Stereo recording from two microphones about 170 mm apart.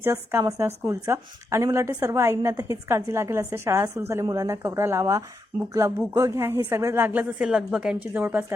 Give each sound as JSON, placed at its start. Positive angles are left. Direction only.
{"t": 0.0, "sound": "a woman's voice", "side_deg": -15}